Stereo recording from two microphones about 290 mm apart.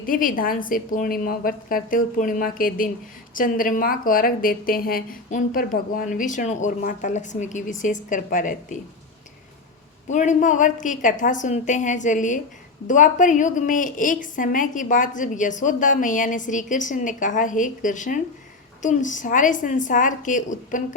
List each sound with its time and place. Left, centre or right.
0.0 s a woman's voice: left
10.1 s a woman's voice: left